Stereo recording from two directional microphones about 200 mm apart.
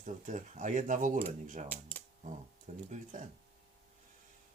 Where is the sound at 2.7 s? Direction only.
35° right (ahead or behind).